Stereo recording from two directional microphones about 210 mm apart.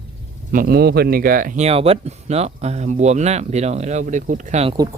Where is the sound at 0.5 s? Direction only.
45° right (ahead or behind).